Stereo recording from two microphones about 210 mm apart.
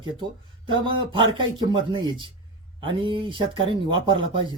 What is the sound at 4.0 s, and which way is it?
Speech, 65° right (ahead or behind).